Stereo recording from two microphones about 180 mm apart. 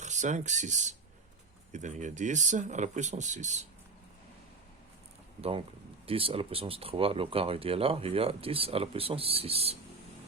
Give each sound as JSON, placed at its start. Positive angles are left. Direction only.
{"t": 0.0, "sound": "speech", "side_deg": -40}
{"t": 5.4, "sound": "speech", "side_deg": -30}